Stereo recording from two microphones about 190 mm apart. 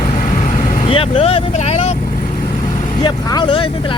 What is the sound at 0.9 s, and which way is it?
Speech, 30° left (ahead or behind).